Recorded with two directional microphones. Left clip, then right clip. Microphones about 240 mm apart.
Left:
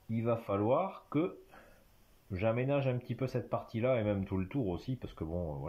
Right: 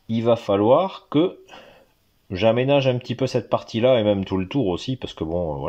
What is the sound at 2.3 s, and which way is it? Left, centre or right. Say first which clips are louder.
Speech: right 15 dB; right.